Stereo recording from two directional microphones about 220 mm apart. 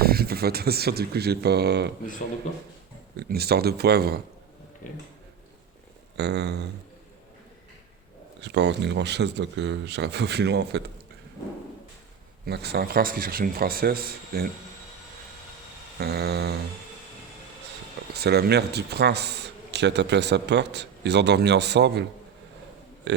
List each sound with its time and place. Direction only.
0.0 s speech: 45° right (ahead or behind)
3.2 s a man's voice: 45° right (ahead or behind)
6.1 s a man's voice: 50° right (ahead or behind)
8.4 s a man's voice: 50° right (ahead or behind)
12.5 s a man's voice: 45° right (ahead or behind)
16.0 s a man's voice: 45° right (ahead or behind)
18.1 s a man's voice: 45° right (ahead or behind)
23.1 s a sound: 55° right (ahead or behind)